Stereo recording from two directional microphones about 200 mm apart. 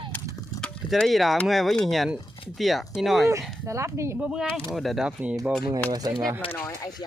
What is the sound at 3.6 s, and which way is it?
Speech, 15° right (ahead or behind).